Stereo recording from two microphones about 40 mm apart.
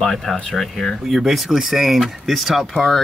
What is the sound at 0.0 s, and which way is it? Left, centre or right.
Speech, centre.